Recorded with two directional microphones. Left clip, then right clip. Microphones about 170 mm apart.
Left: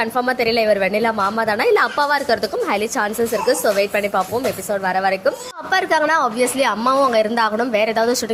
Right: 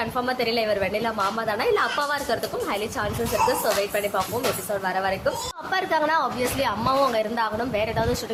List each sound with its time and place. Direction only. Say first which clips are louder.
0.0 s a woman's voice: left 7 dB; 35° left (ahead or behind)